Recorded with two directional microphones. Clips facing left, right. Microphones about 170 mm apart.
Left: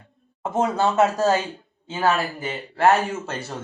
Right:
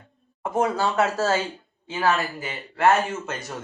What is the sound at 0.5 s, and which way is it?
Speech, 20° left (ahead or behind).